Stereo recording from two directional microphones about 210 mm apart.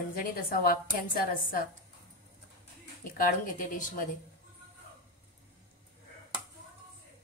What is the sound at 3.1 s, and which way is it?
Speech, 40° left (ahead or behind).